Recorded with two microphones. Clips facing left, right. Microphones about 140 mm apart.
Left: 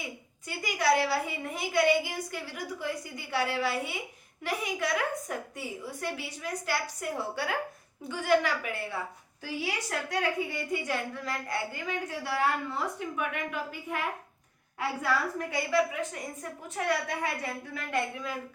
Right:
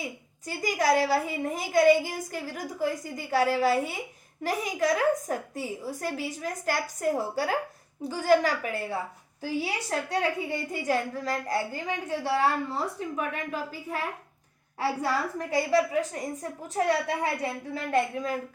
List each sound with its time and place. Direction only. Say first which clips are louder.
0.0 s a woman's voice: right 4 dB; 40° right (ahead or behind)